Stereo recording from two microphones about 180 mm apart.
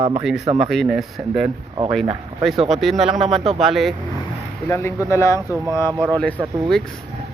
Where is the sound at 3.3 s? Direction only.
30° right (ahead or behind).